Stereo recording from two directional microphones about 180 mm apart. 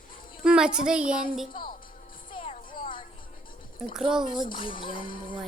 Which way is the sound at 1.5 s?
50° left (ahead or behind).